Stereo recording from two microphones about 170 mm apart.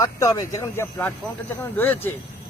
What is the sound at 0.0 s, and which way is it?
Speech, 20° left (ahead or behind).